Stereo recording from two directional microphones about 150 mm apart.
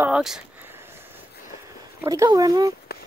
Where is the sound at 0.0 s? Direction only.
5° right (ahead or behind).